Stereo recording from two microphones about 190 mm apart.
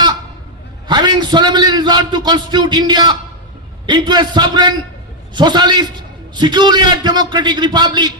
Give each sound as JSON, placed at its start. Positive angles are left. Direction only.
{"t": 0.9, "sound": "a man's voice", "side_deg": -20}